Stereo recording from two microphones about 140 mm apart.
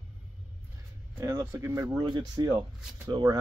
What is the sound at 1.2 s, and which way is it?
Speech, 20° right (ahead or behind).